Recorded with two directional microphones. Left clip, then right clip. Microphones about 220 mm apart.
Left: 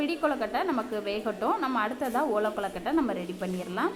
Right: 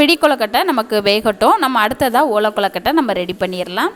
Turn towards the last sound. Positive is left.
turn(degrees=-45)  # may be behind; listen again after turning